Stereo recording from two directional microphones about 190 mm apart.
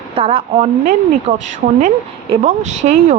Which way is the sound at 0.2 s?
30° right (ahead or behind).